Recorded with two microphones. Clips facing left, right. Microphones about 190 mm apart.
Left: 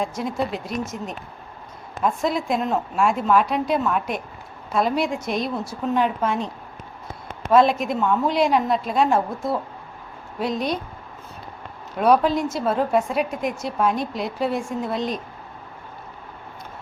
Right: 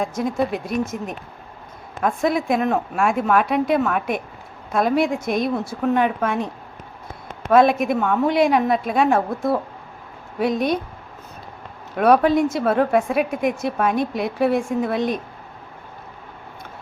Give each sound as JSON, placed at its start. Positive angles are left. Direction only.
{"t": 0.0, "sound": "a woman's voice", "side_deg": -50}
{"t": 7.5, "sound": "a woman's voice", "side_deg": -55}
{"t": 11.9, "sound": "a woman's voice", "side_deg": -60}